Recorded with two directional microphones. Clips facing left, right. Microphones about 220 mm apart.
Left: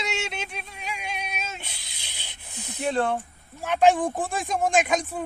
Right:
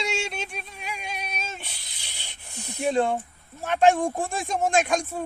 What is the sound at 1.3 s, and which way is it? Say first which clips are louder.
Child singing: even; 10° left (ahead or behind).